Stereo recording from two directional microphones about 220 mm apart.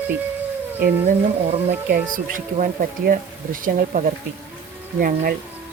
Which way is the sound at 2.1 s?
40° right (ahead or behind).